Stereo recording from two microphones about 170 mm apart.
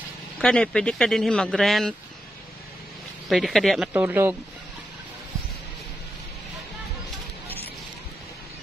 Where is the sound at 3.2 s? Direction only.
Centre (ahead or behind).